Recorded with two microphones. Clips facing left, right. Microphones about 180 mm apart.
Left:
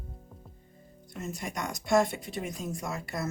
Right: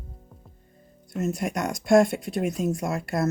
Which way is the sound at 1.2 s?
70° right (ahead or behind).